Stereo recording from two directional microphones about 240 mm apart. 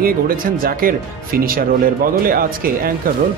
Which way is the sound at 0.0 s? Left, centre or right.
Right.